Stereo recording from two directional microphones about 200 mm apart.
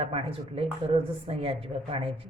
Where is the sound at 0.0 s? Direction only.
30° right (ahead or behind).